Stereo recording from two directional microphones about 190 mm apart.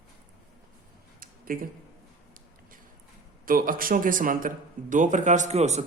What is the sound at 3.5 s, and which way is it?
A man's voice, 45° right (ahead or behind).